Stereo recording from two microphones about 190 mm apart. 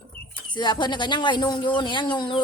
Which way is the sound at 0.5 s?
25° left (ahead or behind).